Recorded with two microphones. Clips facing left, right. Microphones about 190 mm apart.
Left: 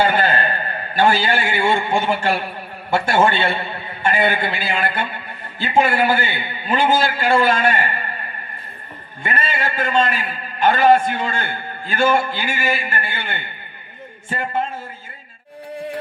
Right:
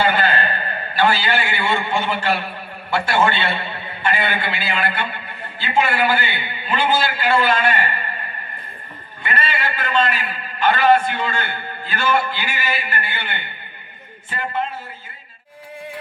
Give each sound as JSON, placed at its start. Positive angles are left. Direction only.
{"t": 0.0, "sound": "a sound", "side_deg": 45}
{"t": 0.9, "sound": "a man's voice", "side_deg": 45}
{"t": 9.2, "sound": "a man's voice", "side_deg": 45}